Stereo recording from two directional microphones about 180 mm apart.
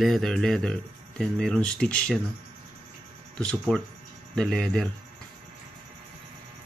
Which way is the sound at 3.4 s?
5° left (ahead or behind).